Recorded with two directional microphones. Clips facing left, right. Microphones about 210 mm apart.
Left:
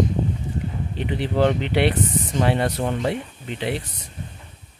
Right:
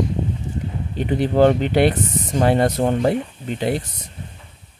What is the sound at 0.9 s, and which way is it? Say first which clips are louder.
Speech: right 6 dB; 45° right (ahead or behind).